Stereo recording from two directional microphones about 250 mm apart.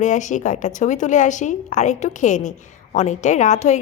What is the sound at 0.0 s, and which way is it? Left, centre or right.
A woman's voice, left.